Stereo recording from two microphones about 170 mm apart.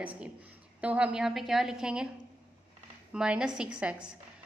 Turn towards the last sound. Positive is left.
turn(degrees=-5)  # may be behind; listen again after turning